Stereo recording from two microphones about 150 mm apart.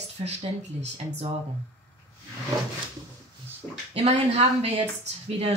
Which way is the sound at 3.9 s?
45° right (ahead or behind).